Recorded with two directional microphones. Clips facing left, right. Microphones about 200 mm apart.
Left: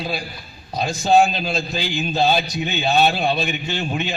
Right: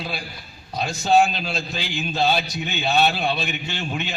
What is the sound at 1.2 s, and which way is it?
A man's voice, 40° left (ahead or behind).